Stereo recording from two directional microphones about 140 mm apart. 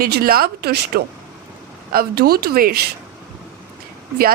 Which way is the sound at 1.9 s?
90° right.